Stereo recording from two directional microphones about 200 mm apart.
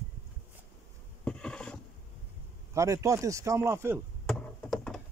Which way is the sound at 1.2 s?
5° left (ahead or behind).